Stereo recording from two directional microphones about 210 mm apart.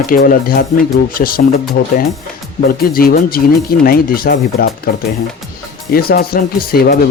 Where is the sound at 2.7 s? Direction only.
45° left (ahead or behind).